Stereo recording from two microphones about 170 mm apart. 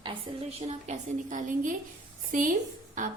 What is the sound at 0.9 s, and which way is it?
Speech, 50° right (ahead or behind).